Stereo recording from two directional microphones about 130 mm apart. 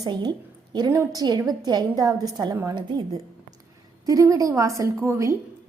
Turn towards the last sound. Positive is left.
turn(degrees=-20)  # may be behind; listen again after turning